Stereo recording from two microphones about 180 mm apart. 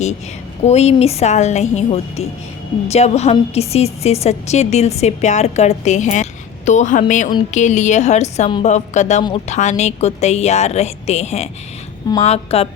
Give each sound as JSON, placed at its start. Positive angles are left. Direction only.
{"t": 0.6, "sound": "a woman's voice", "side_deg": 35}